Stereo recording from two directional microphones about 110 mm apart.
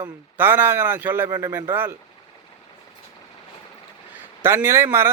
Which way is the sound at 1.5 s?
20° right (ahead or behind).